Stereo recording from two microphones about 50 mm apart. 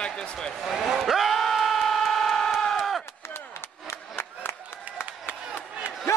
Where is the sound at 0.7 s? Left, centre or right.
Centre.